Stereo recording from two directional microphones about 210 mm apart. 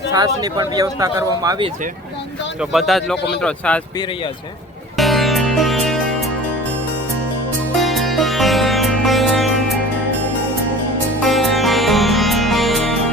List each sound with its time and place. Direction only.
0.1 s speech: 20° right (ahead or behind)
2.6 s speech: centre (ahead or behind)
4.9 s music: centre (ahead or behind)
7.9 s music: centre (ahead or behind)
11.3 s music: centre (ahead or behind)